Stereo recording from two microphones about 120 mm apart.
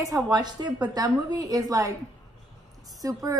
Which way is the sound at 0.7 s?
10° right (ahead or behind).